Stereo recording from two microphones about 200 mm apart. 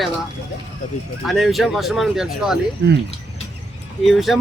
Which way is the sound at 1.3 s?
Centre (ahead or behind).